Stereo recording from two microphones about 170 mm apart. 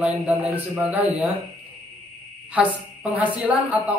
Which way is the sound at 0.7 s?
10° right (ahead or behind).